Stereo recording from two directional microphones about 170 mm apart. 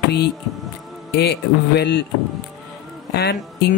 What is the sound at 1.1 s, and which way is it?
Speech, 75° left (ahead or behind).